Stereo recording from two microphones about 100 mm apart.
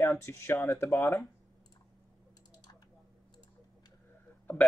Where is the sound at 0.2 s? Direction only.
25° left (ahead or behind).